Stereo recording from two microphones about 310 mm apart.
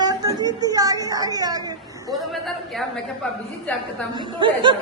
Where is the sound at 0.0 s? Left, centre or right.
Centre.